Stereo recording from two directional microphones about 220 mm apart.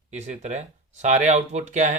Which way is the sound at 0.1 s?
30° right (ahead or behind).